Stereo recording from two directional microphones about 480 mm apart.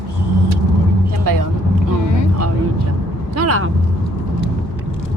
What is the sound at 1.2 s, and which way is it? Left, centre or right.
Speech, right.